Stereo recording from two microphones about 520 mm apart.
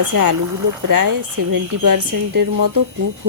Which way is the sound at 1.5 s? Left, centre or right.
Right.